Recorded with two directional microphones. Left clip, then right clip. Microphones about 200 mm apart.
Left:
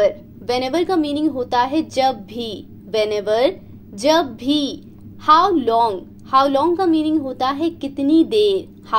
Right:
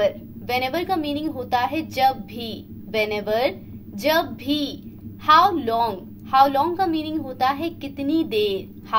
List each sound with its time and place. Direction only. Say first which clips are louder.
0.0 s a woman's voice: left 5 dB; 30° left (ahead or behind)